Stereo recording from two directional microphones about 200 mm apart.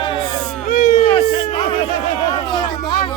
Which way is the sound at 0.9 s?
30° left (ahead or behind).